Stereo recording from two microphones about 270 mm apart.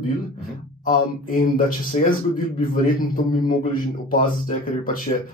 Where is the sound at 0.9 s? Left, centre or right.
Left.